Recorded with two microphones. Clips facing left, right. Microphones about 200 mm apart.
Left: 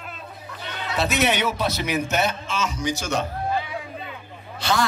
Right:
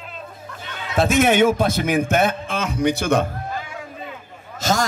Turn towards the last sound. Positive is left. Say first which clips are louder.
# right 2 dB
turn(degrees=-45)  # may be behind; listen again after turning